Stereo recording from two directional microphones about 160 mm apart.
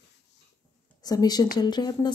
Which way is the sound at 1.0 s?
25° left (ahead or behind).